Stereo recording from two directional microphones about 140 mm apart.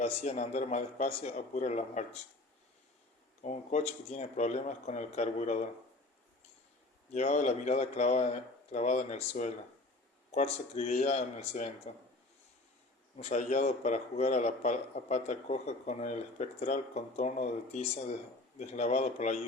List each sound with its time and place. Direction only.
0.0 s a man's voice: 55° left (ahead or behind)
3.4 s a man's voice: 60° left (ahead or behind)
7.1 s a man's voice: 55° left (ahead or behind)
13.1 s a man's voice: 55° left (ahead or behind)